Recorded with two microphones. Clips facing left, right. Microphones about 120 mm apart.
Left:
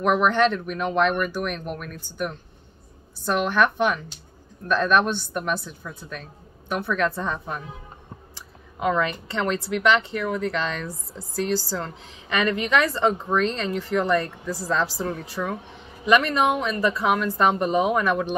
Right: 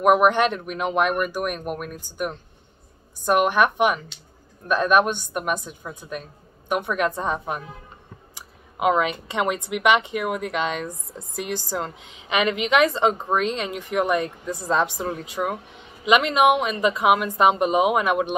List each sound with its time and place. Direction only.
0.2 s speech: 15° right (ahead or behind)
8.4 s speech: 15° right (ahead or behind)